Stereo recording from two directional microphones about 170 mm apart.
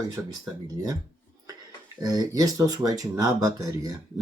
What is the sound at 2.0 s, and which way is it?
Speech, 20° right (ahead or behind).